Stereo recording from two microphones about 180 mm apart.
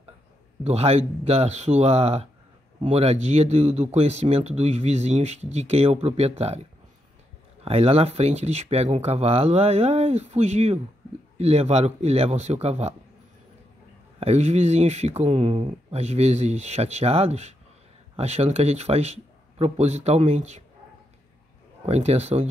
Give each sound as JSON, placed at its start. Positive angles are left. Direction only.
{"t": 0.7, "sound": "speech", "side_deg": -35}
{"t": 7.6, "sound": "speech", "side_deg": -35}
{"t": 14.2, "sound": "speech", "side_deg": -35}
{"t": 21.8, "sound": "speech", "side_deg": -35}